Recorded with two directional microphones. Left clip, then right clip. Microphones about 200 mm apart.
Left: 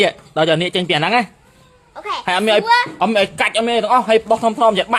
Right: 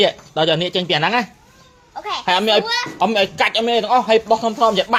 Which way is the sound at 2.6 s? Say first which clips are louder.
Left 6 dB; 55° left (ahead or behind).